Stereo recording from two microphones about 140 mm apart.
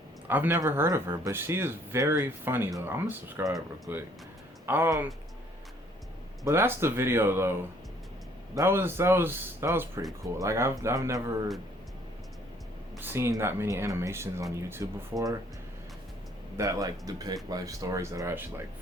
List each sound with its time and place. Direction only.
0.3 s speech: 15° right (ahead or behind)
6.4 s speech: 15° right (ahead or behind)
13.0 s speech: 15° right (ahead or behind)
16.6 s speech: 25° right (ahead or behind)